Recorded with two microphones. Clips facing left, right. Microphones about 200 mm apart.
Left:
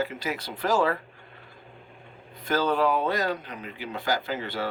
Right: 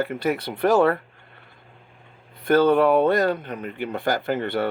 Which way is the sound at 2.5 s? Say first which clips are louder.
Right 7 dB; 55° right (ahead or behind).